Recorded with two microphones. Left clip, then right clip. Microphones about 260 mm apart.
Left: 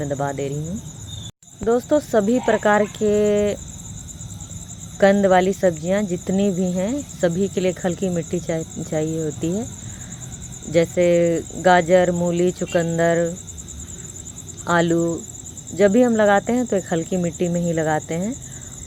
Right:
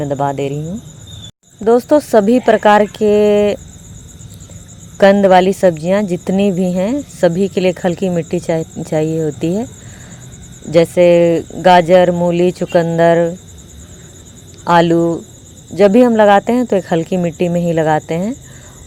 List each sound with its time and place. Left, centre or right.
0.0 s speech: right
1.6 s speech: right
4.9 s speech: right
10.7 s speech: right
14.6 s speech: right